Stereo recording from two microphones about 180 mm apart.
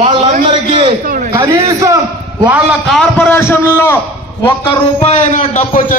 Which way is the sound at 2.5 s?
Centre (ahead or behind).